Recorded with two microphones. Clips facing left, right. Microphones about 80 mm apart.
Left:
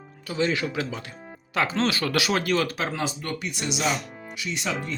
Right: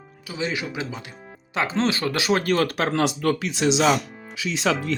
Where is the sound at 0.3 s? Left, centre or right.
Centre.